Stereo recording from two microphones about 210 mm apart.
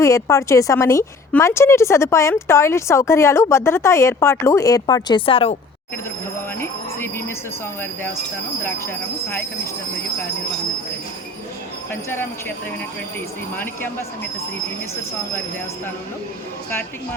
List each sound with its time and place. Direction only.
0.0 s speech: 15° left (ahead or behind)
6.6 s a sound: 10° left (ahead or behind)
8.6 s speech: 10° left (ahead or behind)
11.9 s speech: 10° left (ahead or behind)